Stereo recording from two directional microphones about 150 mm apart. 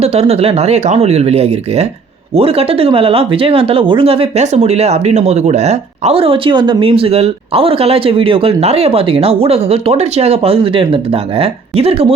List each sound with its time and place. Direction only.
0.0 s speech: 45° right (ahead or behind)